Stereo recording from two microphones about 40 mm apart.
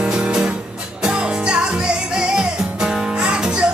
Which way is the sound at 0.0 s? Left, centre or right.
Right.